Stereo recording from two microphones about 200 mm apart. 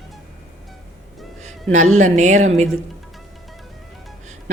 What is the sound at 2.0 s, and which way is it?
Speech, 35° right (ahead or behind).